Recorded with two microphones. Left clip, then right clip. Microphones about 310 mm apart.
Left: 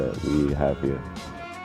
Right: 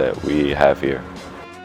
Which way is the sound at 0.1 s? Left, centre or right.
Centre.